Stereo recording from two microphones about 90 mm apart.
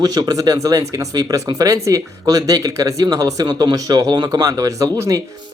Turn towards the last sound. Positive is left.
turn(degrees=-40)  # may be behind; listen again after turning